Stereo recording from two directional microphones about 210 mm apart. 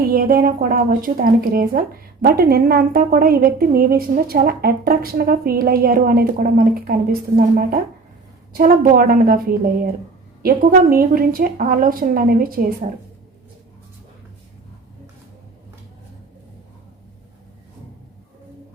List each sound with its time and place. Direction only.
0.0 s a woman's voice: 45° right (ahead or behind)